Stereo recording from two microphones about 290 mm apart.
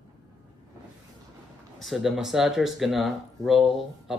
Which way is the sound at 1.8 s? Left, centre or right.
Centre.